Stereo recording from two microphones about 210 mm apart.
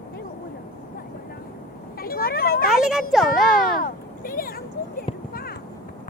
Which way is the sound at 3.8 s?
45° left (ahead or behind).